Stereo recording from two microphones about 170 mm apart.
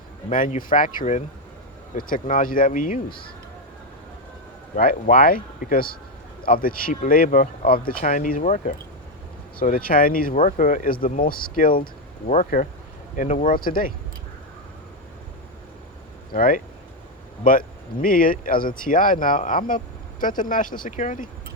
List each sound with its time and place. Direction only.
0.3 s speech: 50° left (ahead or behind)
4.7 s speech: 55° left (ahead or behind)
16.3 s speech: 55° left (ahead or behind)